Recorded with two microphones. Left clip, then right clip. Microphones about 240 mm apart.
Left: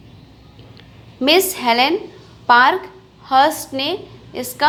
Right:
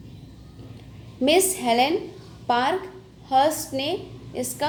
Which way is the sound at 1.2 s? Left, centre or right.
Centre.